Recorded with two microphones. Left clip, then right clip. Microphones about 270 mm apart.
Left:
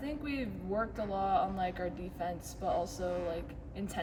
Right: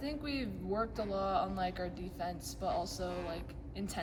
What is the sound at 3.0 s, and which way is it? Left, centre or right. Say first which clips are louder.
Speech: left 4 dB; centre.